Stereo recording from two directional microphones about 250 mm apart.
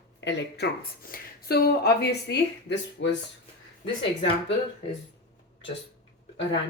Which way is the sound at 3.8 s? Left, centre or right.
Centre.